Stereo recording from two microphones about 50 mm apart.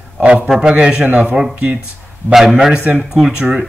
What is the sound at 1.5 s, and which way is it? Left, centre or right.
Speech, right.